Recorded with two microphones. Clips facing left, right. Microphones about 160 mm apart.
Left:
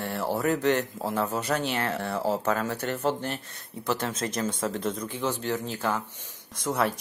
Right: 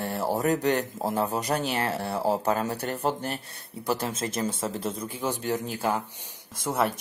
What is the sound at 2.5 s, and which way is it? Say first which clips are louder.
Speech: even; 15° right (ahead or behind).